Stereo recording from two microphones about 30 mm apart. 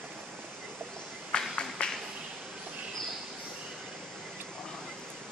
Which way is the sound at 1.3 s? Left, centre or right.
Left.